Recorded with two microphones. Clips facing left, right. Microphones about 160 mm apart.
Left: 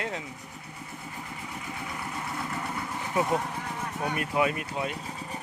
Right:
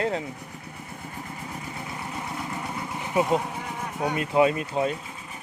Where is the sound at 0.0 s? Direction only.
35° right (ahead or behind).